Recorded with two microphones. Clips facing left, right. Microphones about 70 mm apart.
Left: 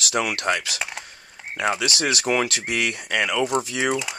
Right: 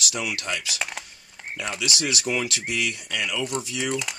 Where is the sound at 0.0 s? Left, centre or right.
Left.